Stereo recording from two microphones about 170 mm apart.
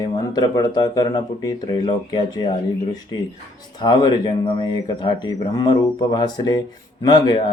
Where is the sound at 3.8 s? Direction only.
25° left (ahead or behind).